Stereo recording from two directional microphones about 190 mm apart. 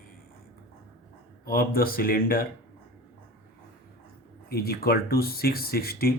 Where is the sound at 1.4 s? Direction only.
50° left (ahead or behind).